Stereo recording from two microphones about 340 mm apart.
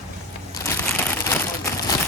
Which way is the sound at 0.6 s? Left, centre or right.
Centre.